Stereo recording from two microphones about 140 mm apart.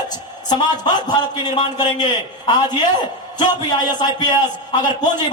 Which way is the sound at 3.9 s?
30° left (ahead or behind).